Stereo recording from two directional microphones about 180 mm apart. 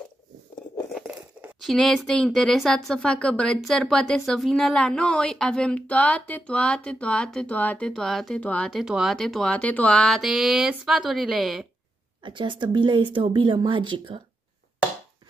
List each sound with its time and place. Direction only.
0.9 s speech: 5° right (ahead or behind)
12.2 s speech: 25° right (ahead or behind)